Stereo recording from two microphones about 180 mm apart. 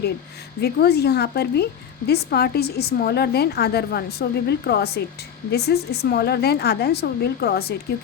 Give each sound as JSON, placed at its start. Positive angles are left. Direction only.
{"t": 0.6, "sound": "a woman's voice", "side_deg": 65}